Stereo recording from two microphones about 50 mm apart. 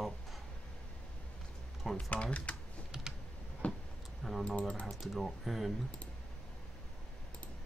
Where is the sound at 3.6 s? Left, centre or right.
Left.